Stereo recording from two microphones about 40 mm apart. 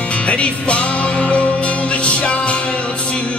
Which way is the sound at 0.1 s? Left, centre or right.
Left.